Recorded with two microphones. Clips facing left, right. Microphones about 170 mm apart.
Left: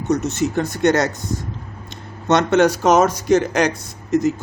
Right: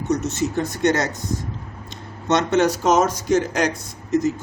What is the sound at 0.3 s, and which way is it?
Speech, 65° left (ahead or behind).